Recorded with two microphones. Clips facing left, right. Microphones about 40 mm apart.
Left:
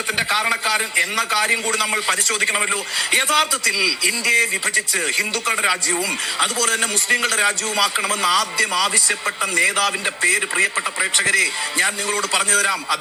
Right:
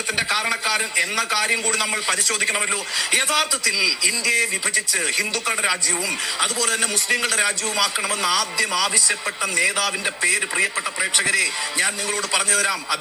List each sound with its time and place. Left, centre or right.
0.2 s a man's voice: centre
4.4 s a man's voice: left
5.1 s speech: centre
7.2 s a man's voice: centre
10.6 s a man's voice: centre